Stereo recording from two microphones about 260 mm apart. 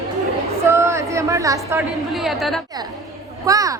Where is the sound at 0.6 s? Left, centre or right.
Centre.